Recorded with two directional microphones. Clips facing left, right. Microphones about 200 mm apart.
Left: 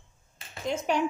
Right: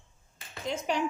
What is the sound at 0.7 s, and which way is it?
Speech, 50° left (ahead or behind).